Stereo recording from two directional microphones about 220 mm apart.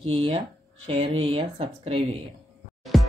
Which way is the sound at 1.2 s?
25° right (ahead or behind).